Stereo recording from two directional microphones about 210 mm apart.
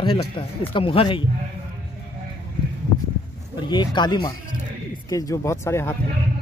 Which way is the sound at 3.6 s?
20° left (ahead or behind).